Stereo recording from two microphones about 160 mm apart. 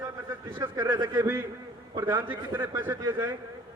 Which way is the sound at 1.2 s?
15° right (ahead or behind).